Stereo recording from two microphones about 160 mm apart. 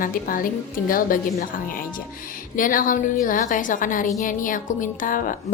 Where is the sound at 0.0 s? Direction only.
60° left (ahead or behind).